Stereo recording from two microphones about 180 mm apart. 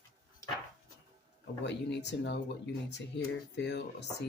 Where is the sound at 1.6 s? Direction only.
75° left (ahead or behind).